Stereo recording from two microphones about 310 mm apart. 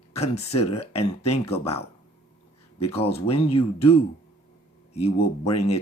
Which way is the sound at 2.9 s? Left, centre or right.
Centre.